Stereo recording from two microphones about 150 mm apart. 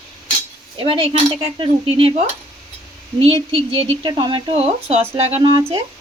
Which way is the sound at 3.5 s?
35° right (ahead or behind).